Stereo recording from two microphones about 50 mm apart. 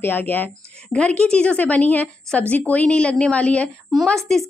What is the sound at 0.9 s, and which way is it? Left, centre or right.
A woman's voice, left.